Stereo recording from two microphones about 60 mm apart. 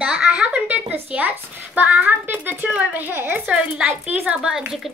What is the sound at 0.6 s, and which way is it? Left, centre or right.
A woman's voice, right.